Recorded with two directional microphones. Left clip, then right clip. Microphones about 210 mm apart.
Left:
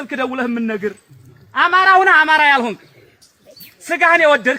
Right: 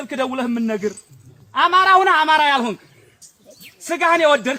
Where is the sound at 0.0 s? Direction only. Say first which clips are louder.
Left 2 dB; 55° right (ahead or behind).